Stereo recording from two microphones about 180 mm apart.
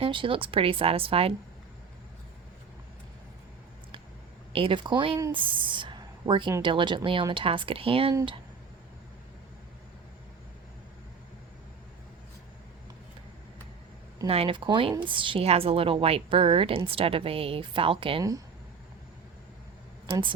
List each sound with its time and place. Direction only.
0.0 s a woman's voice: 30° right (ahead or behind)
4.5 s a woman's voice: 30° right (ahead or behind)
14.3 s a woman's voice: 30° right (ahead or behind)
18.2 s speech: 20° right (ahead or behind)
20.1 s speech: 30° right (ahead or behind)